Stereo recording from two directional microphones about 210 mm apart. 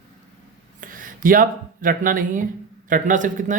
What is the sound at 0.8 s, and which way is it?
Speech, 40° right (ahead or behind).